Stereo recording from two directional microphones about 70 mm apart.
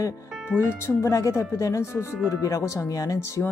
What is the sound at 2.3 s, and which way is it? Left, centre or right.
Speech, left.